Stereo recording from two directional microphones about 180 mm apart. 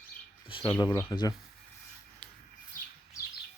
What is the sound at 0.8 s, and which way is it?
Speech, 20° left (ahead or behind).